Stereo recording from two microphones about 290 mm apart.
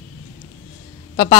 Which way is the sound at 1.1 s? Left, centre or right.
Centre.